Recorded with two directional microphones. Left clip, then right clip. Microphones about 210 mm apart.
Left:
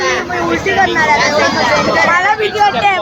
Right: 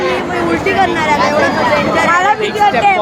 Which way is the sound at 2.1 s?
20° right (ahead or behind).